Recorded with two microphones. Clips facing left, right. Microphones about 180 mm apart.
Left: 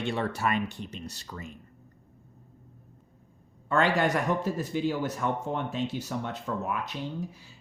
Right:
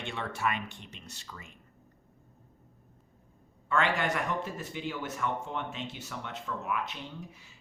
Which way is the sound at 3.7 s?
40° left (ahead or behind).